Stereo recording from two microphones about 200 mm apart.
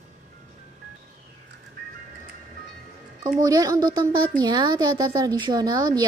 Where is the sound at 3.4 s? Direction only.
20° right (ahead or behind).